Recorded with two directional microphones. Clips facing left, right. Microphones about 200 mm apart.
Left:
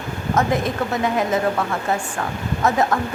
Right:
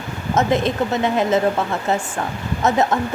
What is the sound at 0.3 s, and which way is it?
A woman's voice, 25° right (ahead or behind).